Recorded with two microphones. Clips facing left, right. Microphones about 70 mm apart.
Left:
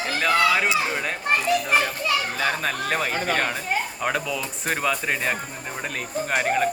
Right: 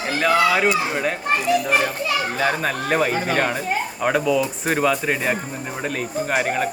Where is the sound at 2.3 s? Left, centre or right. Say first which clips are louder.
Right 3 dB; centre.